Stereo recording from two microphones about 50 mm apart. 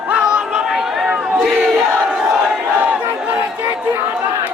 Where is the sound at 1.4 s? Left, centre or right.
Centre.